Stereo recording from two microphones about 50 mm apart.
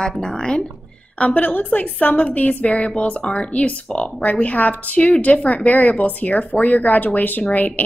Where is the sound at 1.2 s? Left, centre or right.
Left.